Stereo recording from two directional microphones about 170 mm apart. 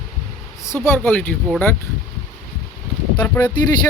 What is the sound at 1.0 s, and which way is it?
Speech, 10° left (ahead or behind).